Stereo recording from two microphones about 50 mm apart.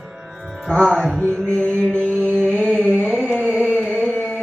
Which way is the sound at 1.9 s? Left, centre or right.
Right.